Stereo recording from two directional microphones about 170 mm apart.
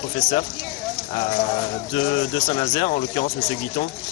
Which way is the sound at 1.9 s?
30° left (ahead or behind).